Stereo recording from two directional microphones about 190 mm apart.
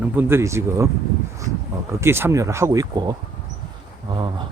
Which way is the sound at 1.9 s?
15° right (ahead or behind).